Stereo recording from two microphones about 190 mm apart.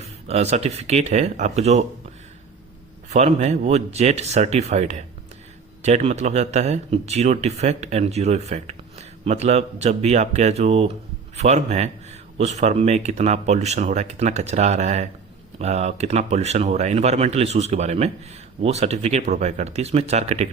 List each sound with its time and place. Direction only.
0.3 s speech: 35° right (ahead or behind)
3.1 s speech: 35° right (ahead or behind)